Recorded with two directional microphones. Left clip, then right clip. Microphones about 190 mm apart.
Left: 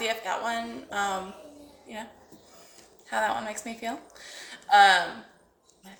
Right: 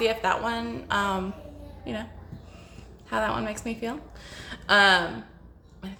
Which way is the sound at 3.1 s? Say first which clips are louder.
Right 1 dB; 15° right (ahead or behind).